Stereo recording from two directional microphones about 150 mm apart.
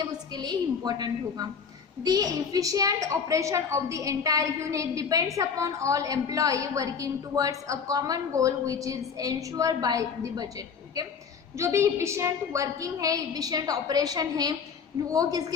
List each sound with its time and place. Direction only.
0.0 s a woman's voice: 30° right (ahead or behind)
11.5 s a woman's voice: 20° right (ahead or behind)